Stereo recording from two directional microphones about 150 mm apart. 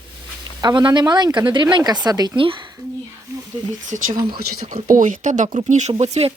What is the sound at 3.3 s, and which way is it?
Speech, 20° right (ahead or behind).